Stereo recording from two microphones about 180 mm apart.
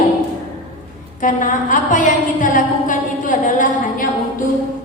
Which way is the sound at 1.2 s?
45° left (ahead or behind).